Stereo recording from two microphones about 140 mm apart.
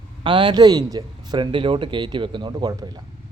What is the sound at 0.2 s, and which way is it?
Speech, 35° right (ahead or behind).